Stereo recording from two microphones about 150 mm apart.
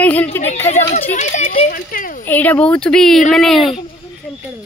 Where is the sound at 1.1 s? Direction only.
50° left (ahead or behind).